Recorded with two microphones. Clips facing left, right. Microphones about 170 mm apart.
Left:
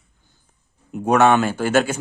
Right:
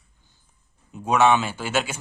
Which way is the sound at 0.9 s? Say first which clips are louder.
Left 4 dB; 60° left (ahead or behind).